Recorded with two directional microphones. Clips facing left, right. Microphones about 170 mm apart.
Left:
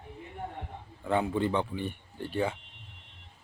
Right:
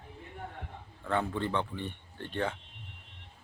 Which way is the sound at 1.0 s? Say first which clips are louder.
Left 4 dB; 15° left (ahead or behind).